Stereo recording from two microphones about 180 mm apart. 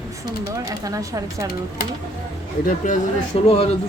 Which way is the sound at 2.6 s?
45° left (ahead or behind).